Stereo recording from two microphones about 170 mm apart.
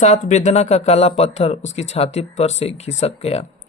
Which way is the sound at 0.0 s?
45° left (ahead or behind).